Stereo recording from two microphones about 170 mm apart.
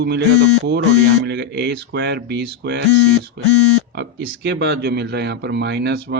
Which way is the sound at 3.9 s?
75° right (ahead or behind).